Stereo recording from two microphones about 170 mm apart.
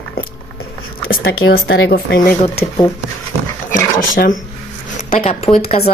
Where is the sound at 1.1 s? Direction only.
65° left (ahead or behind).